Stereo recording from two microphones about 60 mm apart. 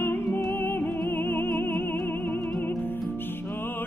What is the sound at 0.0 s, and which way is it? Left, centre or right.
Music, left.